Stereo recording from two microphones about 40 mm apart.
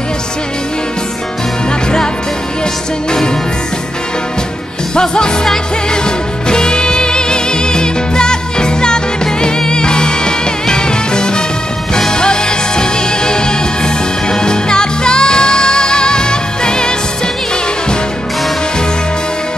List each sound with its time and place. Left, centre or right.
4.9 s music: left